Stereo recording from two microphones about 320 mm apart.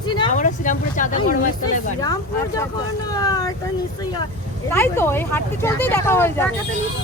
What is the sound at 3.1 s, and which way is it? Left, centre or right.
Speech, centre.